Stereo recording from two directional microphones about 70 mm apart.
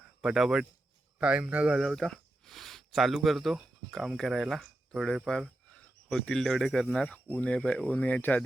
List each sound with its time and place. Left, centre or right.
0.0 s speech: centre
1.2 s speech: centre
1.7 s speech: centre
6.8 s speech: centre